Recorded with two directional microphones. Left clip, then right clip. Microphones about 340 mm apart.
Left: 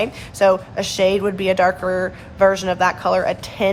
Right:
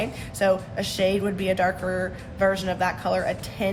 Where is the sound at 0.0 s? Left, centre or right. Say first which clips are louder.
Left 8 dB; centre.